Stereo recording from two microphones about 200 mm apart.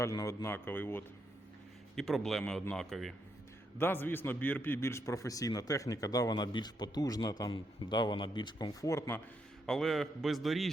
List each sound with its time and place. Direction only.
0.0 s a man's voice: 15° left (ahead or behind)
9.6 s a man's voice: centre (ahead or behind)